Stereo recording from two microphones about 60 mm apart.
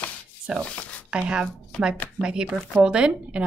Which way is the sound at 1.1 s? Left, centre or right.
Centre.